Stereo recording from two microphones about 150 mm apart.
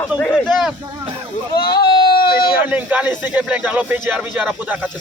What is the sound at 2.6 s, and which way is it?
Speech, 10° right (ahead or behind).